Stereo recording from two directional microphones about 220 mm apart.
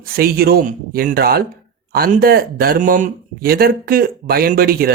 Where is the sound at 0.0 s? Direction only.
40° right (ahead or behind).